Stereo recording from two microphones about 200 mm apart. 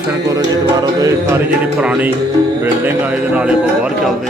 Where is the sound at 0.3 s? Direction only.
20° right (ahead or behind).